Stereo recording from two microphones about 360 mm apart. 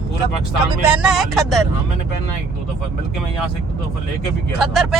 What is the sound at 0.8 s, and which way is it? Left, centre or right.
Speech, centre.